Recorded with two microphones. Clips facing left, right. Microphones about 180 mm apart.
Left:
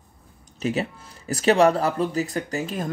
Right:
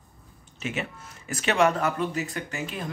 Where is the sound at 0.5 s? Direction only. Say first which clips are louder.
Left 7 dB; 35° left (ahead or behind).